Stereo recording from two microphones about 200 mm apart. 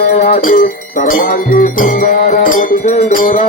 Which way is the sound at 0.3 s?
40° left (ahead or behind).